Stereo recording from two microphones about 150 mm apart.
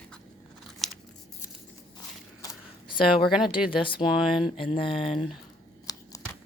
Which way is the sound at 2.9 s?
30° left (ahead or behind).